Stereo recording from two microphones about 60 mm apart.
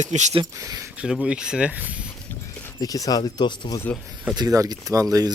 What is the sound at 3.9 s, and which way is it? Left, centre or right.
Speech, left.